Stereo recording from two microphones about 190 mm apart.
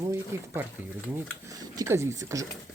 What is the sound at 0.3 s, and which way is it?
Speech, 15° right (ahead or behind).